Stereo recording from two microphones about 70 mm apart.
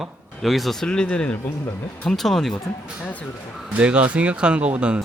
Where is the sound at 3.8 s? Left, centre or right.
Centre.